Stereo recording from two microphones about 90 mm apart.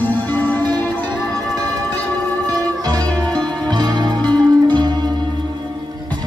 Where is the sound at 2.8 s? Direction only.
45° right (ahead or behind).